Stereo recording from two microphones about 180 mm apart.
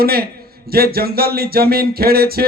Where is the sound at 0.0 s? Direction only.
60° right (ahead or behind).